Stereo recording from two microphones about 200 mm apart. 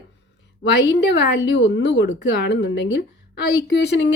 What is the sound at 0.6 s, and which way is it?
A woman's voice, 60° left (ahead or behind).